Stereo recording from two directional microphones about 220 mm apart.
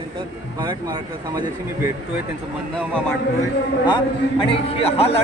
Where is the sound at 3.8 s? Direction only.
20° left (ahead or behind).